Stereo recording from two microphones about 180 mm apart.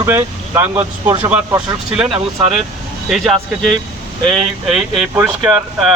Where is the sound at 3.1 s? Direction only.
Centre (ahead or behind).